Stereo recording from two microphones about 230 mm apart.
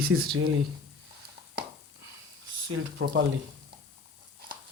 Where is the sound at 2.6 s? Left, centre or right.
Right.